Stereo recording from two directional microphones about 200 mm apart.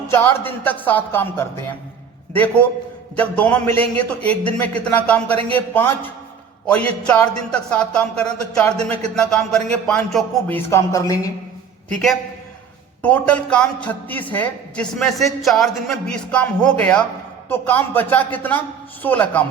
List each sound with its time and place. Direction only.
0.1 s speech: 10° left (ahead or behind)
5.3 s speech: 30° right (ahead or behind)
5.5 s a man's voice: 10° left (ahead or behind)
10.7 s speech: 15° left (ahead or behind)
13.0 s a man's voice: 5° left (ahead or behind)